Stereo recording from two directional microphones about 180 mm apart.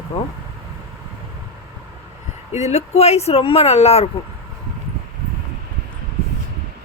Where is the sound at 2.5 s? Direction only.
40° left (ahead or behind).